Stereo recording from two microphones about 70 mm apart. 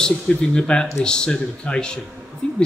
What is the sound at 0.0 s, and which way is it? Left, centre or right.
A man's voice, centre.